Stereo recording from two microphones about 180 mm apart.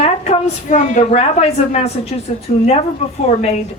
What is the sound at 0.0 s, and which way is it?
A woman's voice, 35° left (ahead or behind).